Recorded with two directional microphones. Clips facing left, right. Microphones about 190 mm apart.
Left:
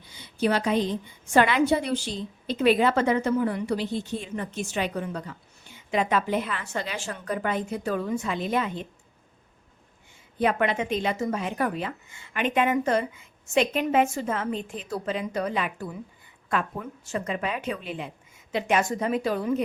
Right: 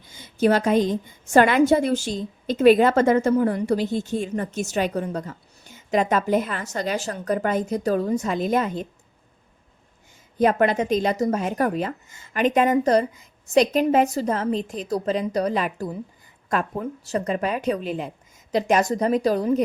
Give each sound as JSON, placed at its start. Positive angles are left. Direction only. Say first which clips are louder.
{"t": 0.0, "sound": "a woman's voice", "louder": "right 5 dB", "side_deg": -45}
{"t": 10.3, "sound": "speech", "louder": "right 5 dB", "side_deg": -40}